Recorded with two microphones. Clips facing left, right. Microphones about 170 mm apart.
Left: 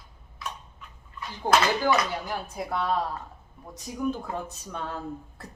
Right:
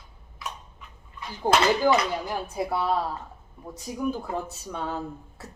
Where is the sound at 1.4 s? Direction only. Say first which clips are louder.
Right 2 dB; 10° right (ahead or behind).